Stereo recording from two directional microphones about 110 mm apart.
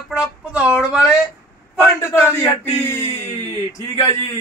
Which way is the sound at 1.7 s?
20° left (ahead or behind).